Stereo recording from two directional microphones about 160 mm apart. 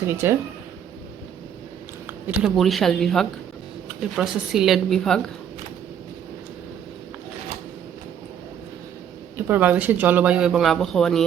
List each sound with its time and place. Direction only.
0.1 s a man's voice: 15° right (ahead or behind)
2.0 s a sound: 10° right (ahead or behind)
2.6 s a woman's voice: centre (ahead or behind)
9.5 s a man's voice: 10° right (ahead or behind)